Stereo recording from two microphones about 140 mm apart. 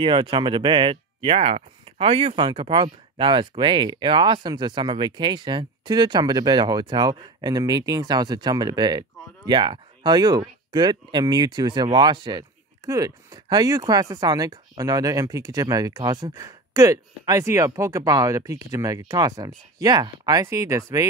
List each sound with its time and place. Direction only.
0.0 s speech: 35° right (ahead or behind)